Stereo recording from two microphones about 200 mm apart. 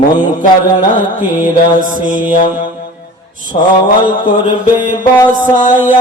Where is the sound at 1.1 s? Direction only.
40° right (ahead or behind).